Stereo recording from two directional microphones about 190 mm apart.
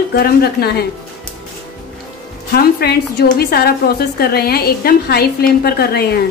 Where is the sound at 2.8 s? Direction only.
55° left (ahead or behind).